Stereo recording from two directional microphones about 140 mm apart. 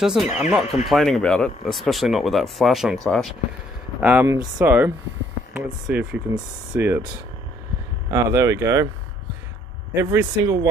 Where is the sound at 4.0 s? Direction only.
15° right (ahead or behind).